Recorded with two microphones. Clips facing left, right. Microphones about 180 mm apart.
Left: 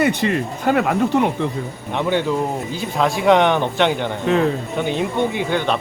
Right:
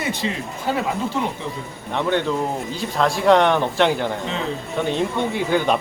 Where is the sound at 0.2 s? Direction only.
60° left (ahead or behind).